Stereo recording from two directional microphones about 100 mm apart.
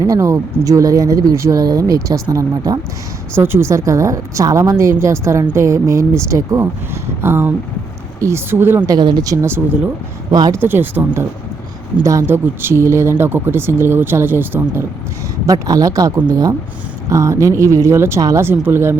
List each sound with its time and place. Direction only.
0.0 s speech: 30° right (ahead or behind)
3.3 s a woman's voice: 25° right (ahead or behind)
8.9 s a woman's voice: 45° right (ahead or behind); by 14.8 s 20° right (ahead or behind)
15.4 s a woman's voice: 35° right (ahead or behind)